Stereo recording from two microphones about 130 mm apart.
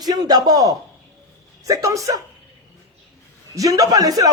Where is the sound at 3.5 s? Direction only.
25° right (ahead or behind).